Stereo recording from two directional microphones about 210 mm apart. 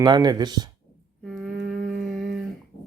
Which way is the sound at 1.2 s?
Centre (ahead or behind).